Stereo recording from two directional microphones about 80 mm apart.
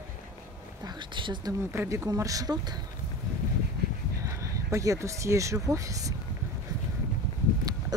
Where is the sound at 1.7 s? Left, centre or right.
Right.